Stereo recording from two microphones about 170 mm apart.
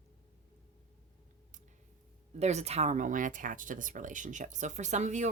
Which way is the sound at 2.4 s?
40° right (ahead or behind).